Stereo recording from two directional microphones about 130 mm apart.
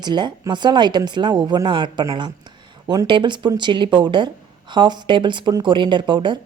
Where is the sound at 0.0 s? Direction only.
35° right (ahead or behind).